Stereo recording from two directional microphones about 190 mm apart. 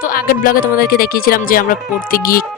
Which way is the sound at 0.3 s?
50° left (ahead or behind).